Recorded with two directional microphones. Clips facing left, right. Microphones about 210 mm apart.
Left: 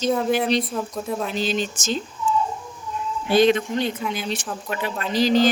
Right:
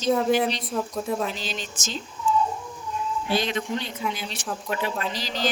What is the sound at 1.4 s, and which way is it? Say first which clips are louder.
Speech: left 10 dB; 55° left (ahead or behind).